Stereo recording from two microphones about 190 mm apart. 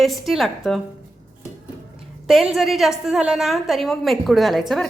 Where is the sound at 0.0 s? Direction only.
Centre (ahead or behind).